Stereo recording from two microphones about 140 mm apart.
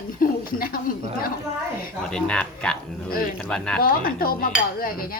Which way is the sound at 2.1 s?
5° left (ahead or behind).